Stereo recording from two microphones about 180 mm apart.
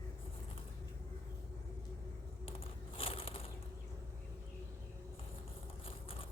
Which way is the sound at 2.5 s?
30° left (ahead or behind).